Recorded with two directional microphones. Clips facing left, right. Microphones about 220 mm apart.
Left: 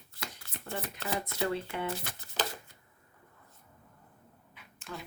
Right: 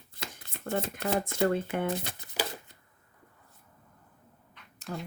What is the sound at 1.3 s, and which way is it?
Speech, 50° right (ahead or behind).